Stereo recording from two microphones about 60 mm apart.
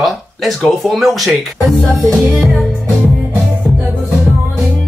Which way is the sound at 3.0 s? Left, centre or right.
Right.